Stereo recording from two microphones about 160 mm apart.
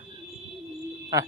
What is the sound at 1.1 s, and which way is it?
Speech, 20° right (ahead or behind).